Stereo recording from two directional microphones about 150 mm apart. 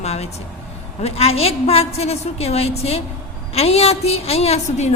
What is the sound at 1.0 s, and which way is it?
A woman's voice, 45° left (ahead or behind).